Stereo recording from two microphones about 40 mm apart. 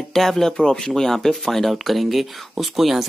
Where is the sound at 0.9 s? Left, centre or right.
Centre.